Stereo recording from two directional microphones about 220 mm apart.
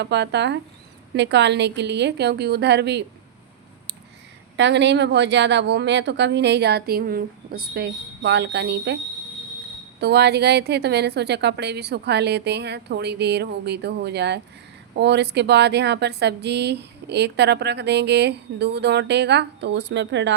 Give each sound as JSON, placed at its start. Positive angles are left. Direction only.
{"t": 0.0, "sound": "a woman's voice", "side_deg": -50}
{"t": 4.5, "sound": "a woman's voice", "side_deg": -55}
{"t": 10.0, "sound": "a woman's voice", "side_deg": -50}